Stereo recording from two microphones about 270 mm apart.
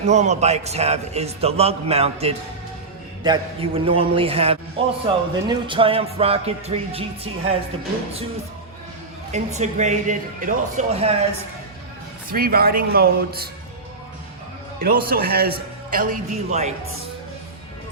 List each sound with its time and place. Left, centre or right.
0.0 s a man's voice: right
9.3 s a man's voice: right
12.3 s a man's voice: right
14.8 s a man's voice: right